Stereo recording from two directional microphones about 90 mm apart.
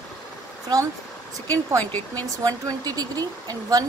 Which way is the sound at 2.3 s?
40° right (ahead or behind).